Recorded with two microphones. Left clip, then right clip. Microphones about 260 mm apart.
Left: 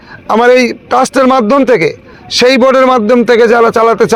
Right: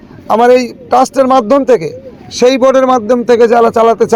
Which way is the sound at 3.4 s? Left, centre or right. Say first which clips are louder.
Right 1 dB; left.